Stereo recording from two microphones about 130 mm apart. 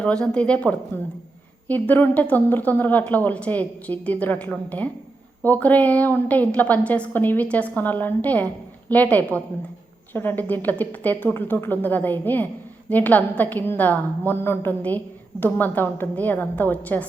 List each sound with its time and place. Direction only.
0.0 s a woman's voice: 10° left (ahead or behind)